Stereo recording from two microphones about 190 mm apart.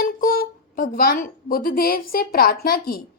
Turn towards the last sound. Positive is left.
turn(degrees=50)  # may be behind; listen again after turning